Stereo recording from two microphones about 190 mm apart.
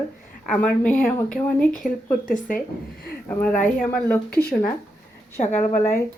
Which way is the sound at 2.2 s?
45° left (ahead or behind).